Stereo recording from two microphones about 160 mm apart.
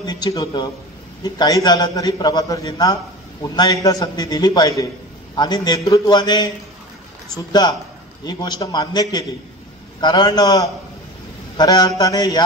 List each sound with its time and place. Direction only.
0.0 s a man's voice: 25° left (ahead or behind)
8.3 s a man's voice: 25° left (ahead or behind)